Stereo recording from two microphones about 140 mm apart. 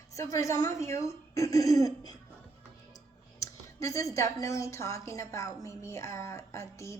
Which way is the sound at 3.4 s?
25° left (ahead or behind).